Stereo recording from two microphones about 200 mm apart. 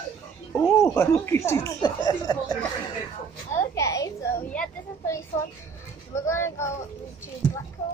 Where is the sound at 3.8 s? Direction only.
15° left (ahead or behind).